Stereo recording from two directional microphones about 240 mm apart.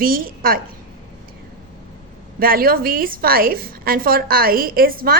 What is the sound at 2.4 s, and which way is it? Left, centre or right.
A woman's voice, right.